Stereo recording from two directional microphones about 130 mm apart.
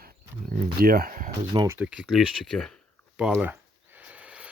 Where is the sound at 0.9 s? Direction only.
90° right.